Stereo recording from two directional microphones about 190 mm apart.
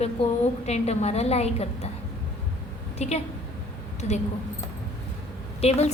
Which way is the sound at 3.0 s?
35° left (ahead or behind).